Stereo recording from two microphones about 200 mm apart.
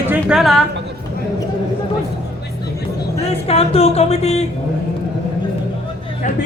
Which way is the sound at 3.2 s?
30° left (ahead or behind).